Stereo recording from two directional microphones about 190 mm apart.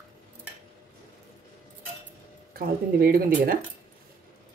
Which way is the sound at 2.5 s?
50° right (ahead or behind).